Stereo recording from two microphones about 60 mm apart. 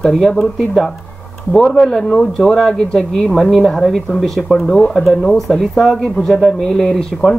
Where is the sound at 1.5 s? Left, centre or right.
Centre.